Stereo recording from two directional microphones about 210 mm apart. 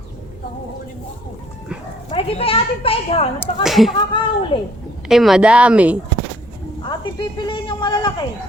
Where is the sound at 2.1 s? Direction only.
25° left (ahead or behind).